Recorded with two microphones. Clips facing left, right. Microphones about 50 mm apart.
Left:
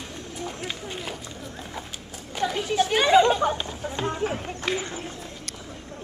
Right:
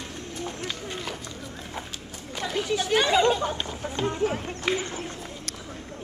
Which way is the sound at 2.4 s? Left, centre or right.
Left.